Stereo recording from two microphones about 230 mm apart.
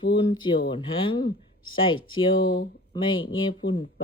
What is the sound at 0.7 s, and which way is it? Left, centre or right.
Speech, left.